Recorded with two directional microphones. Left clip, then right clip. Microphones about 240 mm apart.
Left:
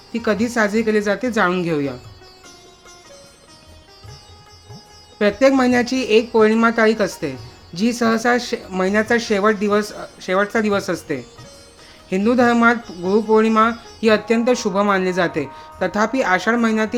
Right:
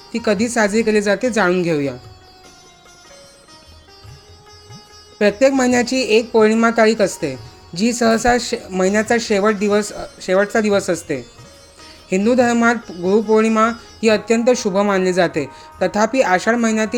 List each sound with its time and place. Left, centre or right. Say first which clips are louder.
0.1 s speech: right 2 dB; centre
5.1 s speech: right 1 dB; centre